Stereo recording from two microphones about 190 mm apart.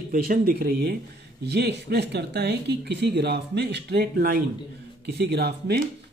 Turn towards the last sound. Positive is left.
turn(degrees=-60)  # may be behind; listen again after turning